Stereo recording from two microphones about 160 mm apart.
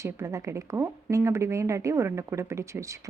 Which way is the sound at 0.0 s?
20° right (ahead or behind).